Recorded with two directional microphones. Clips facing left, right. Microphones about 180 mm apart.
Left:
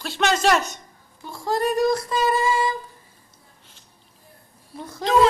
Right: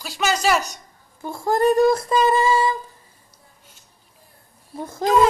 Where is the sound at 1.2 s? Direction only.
50° right (ahead or behind).